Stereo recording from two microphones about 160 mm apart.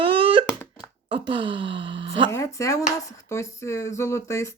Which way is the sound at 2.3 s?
20° left (ahead or behind).